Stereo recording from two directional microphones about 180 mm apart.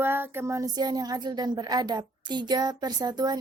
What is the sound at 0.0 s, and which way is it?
Speech, 10° right (ahead or behind).